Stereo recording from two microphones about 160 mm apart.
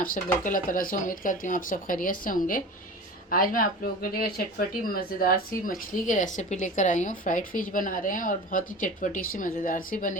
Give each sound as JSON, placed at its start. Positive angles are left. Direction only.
{"t": 0.0, "sound": "speech", "side_deg": 55}